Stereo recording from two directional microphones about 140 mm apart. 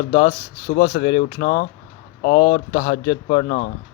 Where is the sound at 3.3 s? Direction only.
55° left (ahead or behind).